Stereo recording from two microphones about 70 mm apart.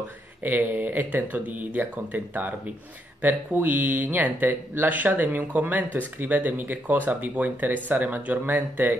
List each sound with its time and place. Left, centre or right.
0.4 s speech: right